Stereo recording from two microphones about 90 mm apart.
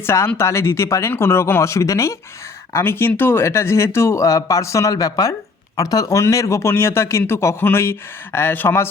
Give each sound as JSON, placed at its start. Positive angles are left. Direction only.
{"t": 0.0, "sound": "speech", "side_deg": 30}